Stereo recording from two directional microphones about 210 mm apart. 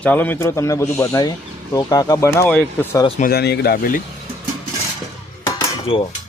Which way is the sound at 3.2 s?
50° left (ahead or behind).